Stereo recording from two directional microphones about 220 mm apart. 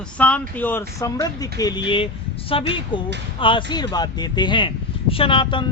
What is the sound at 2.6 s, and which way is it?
Speech, 25° left (ahead or behind).